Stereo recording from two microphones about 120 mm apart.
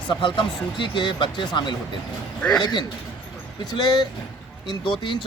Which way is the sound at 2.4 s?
10° left (ahead or behind).